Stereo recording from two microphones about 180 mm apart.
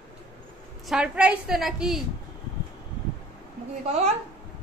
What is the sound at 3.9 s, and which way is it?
Speech, 40° right (ahead or behind).